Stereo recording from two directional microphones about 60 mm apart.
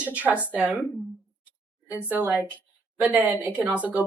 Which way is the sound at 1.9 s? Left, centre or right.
Right.